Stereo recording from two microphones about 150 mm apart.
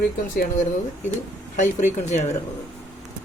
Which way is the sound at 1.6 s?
55° left (ahead or behind).